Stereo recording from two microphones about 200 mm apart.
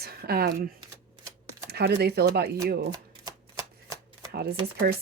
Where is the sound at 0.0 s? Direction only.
50° right (ahead or behind).